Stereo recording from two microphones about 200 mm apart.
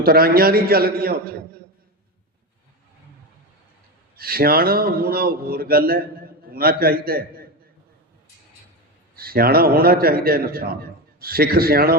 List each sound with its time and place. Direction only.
0.0 s a man's voice: 50° right (ahead or behind)
4.2 s a man's voice: 50° right (ahead or behind)
9.1 s a man's voice: 50° right (ahead or behind)